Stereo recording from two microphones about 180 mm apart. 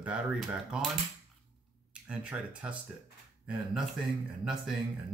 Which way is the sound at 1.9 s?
5° right (ahead or behind).